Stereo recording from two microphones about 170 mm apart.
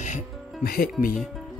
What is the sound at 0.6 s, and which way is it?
Speech, 60° left (ahead or behind).